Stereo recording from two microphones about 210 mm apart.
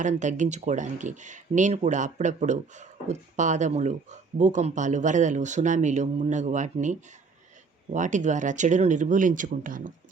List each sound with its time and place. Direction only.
0.0 s speech: 35° right (ahead or behind)
7.9 s speech: 35° right (ahead or behind)